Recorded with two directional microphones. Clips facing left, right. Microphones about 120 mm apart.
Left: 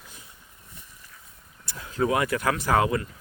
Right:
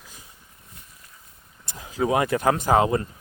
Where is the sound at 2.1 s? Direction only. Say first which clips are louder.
Right 6 dB; 25° right (ahead or behind).